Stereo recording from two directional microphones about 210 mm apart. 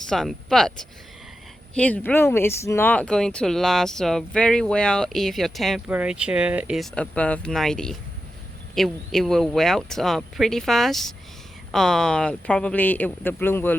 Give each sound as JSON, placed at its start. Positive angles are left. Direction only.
{"t": 0.0, "sound": "speech", "side_deg": 0}
{"t": 1.7, "sound": "speech", "side_deg": 5}